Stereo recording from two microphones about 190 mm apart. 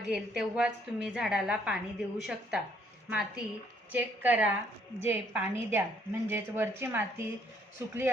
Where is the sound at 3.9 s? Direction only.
10° right (ahead or behind).